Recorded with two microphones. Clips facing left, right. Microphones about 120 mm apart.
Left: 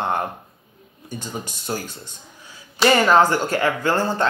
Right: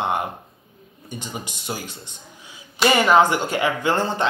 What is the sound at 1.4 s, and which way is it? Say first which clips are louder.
Speech: left 3 dB; 15° right (ahead or behind).